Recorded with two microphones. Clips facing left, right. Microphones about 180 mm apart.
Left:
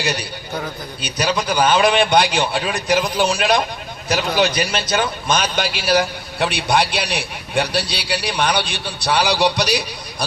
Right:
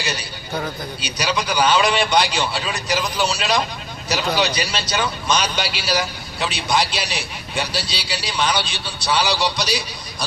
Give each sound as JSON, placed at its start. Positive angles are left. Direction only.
{"t": 0.0, "sound": "a man's voice", "side_deg": 60}